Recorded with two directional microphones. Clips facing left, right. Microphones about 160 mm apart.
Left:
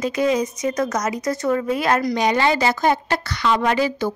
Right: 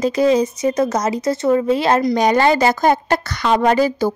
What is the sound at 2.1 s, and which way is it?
A woman's voice, 45° right (ahead or behind).